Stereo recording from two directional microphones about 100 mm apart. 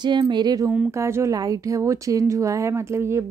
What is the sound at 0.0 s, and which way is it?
Speech, 50° right (ahead or behind).